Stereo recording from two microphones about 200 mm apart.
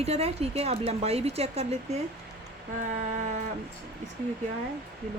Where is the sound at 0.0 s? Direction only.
30° right (ahead or behind).